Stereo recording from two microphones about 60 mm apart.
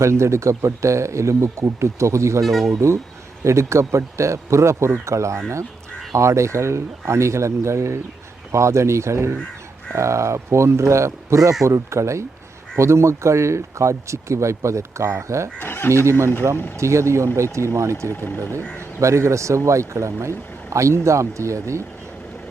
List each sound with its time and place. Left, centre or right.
0.0 s speech: right
2.4 s speech: centre
3.4 s speech: right
15.5 s speech: left
16.0 s speech: right
18.1 s speech: left
18.9 s speech: right